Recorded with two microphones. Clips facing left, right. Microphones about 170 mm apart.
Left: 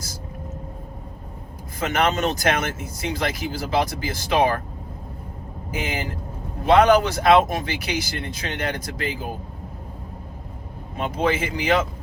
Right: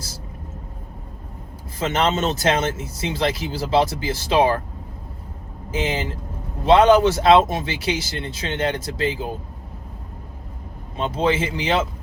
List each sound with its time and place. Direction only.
1.8 s speech: 25° right (ahead or behind)
5.7 s speech: 25° right (ahead or behind)
10.9 s speech: 30° right (ahead or behind)